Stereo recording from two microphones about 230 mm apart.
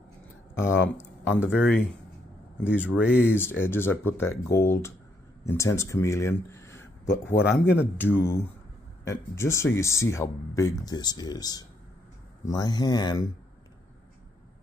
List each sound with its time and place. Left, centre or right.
0.6 s speech: centre
1.3 s speech: centre
2.6 s speech: centre
2.9 s speech: centre
3.2 s speech: centre